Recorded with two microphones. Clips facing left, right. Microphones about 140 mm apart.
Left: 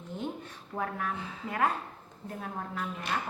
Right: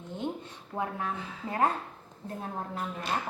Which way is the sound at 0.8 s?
25° right (ahead or behind).